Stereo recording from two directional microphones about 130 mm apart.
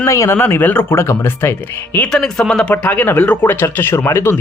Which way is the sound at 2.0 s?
5° left (ahead or behind).